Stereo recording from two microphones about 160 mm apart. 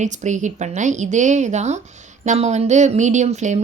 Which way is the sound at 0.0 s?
50° right (ahead or behind).